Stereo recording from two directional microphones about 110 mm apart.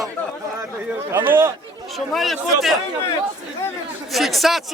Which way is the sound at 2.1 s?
Centre (ahead or behind).